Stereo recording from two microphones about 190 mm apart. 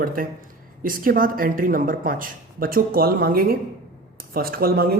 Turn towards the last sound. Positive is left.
turn(degrees=-50)  # may be behind; listen again after turning